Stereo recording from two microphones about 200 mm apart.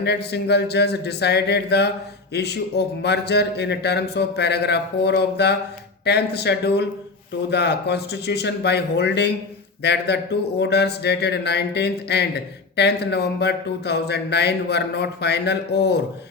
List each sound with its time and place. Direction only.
0.0 s speech: 55° left (ahead or behind)